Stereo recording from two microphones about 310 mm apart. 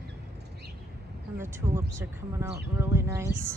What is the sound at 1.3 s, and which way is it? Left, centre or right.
Speech, centre.